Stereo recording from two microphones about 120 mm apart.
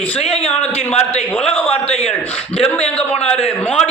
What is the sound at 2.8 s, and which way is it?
Speech, 10° left (ahead or behind).